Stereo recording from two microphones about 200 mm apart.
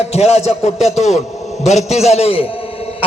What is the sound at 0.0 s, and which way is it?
Music, 30° left (ahead or behind).